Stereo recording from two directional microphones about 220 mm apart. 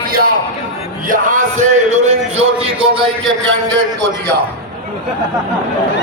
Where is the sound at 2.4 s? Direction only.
25° right (ahead or behind).